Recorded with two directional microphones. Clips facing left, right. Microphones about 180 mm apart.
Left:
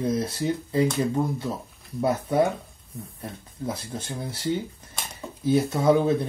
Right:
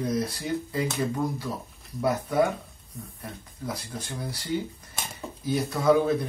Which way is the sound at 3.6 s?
25° left (ahead or behind).